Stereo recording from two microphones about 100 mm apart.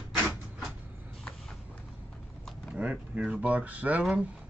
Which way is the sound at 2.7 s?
15° right (ahead or behind).